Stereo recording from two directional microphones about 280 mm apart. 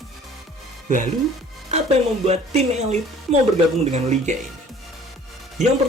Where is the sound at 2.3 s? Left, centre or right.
Right.